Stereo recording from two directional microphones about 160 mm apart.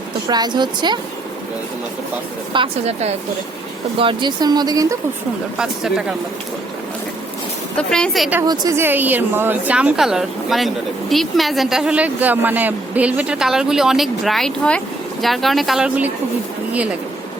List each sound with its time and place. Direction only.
0.3 s speech: 25° right (ahead or behind)
2.5 s a woman's voice: 35° right (ahead or behind)
5.5 s a woman's voice: 5° right (ahead or behind)
7.8 s a woman's voice: 5° left (ahead or behind)
8.4 s a woman's voice: 20° right (ahead or behind); by 16.0 s 5° right (ahead or behind)